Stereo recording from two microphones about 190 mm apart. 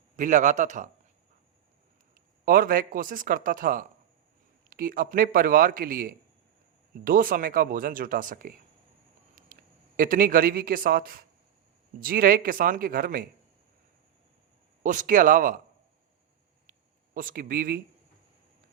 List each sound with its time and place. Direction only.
0.2 s a man's voice: 40° right (ahead or behind)
2.4 s a man's voice: 50° right (ahead or behind)
9.5 s a sound: 45° right (ahead or behind)
10.0 s speech: 45° right (ahead or behind)
14.8 s speech: 45° right (ahead or behind)
17.2 s speech: 50° right (ahead or behind)